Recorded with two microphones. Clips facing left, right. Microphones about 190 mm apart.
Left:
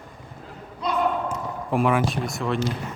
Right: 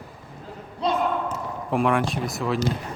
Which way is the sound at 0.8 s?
30° right (ahead or behind).